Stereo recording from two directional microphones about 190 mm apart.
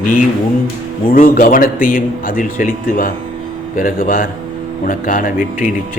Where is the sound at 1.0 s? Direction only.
45° left (ahead or behind).